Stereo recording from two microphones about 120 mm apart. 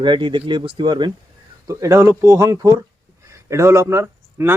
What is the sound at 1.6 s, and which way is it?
Speech, 25° right (ahead or behind).